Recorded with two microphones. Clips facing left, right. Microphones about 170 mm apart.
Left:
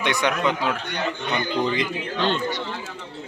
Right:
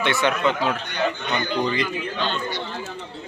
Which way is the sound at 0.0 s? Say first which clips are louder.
Right 1 dB; 15° left (ahead or behind).